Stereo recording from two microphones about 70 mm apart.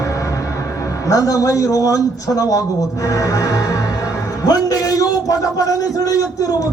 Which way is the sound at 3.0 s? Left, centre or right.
Left.